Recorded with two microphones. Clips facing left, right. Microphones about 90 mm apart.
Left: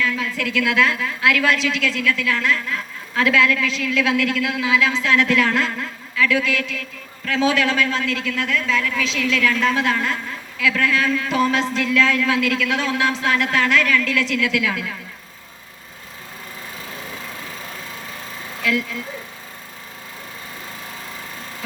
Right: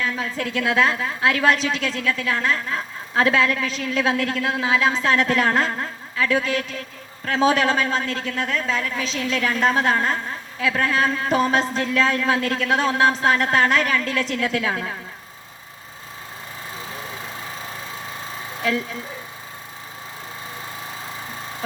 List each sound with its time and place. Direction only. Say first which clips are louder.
0.0 s a man's voice: left 2 dB; 35° right (ahead or behind)
18.6 s a man's voice: left 1 dB; 35° right (ahead or behind)